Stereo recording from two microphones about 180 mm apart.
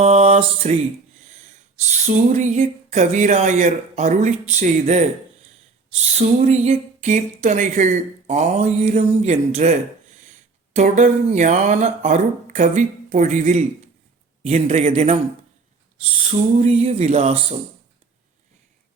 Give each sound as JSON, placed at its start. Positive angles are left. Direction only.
{"t": 0.0, "sound": "a sound", "side_deg": -35}
{"t": 1.8, "sound": "speech", "side_deg": -40}
{"t": 10.8, "sound": "speech", "side_deg": -45}
{"t": 16.6, "sound": "speech", "side_deg": -35}